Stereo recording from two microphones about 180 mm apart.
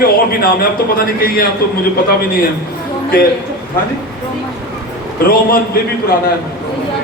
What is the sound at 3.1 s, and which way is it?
Speech, 55° left (ahead or behind).